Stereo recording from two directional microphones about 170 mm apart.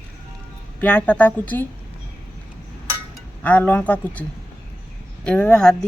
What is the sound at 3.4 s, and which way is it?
Speech, 10° left (ahead or behind).